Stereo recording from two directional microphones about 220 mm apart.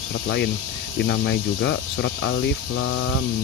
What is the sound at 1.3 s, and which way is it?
Speech, 55° left (ahead or behind).